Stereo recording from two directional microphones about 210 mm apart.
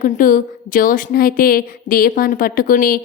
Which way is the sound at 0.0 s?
40° left (ahead or behind).